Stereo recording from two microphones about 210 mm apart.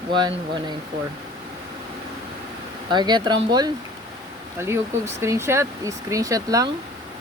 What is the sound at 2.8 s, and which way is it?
Speech, 20° right (ahead or behind).